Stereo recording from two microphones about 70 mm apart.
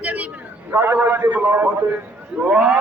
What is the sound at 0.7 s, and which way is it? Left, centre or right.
A man's voice, right.